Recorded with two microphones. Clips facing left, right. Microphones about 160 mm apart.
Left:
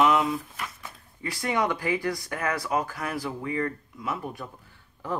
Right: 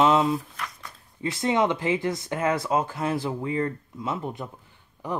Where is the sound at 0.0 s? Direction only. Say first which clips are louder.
Right 2 dB; 25° right (ahead or behind).